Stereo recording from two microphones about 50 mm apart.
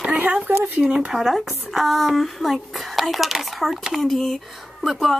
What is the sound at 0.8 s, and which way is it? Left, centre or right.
Speech, centre.